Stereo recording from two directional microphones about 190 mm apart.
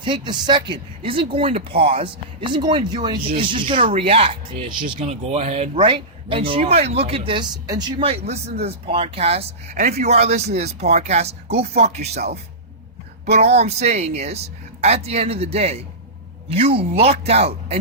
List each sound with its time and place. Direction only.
0.0 s speech: 25° right (ahead or behind)
5.8 s speech: 25° right (ahead or behind)
13.2 s speech: 35° right (ahead or behind)